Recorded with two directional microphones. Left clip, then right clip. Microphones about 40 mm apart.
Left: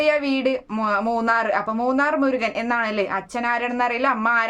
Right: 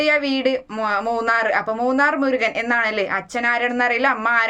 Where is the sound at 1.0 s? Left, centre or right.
Left.